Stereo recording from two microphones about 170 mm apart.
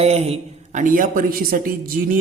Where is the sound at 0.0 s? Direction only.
35° right (ahead or behind).